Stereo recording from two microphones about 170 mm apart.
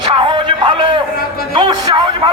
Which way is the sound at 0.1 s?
30° right (ahead or behind).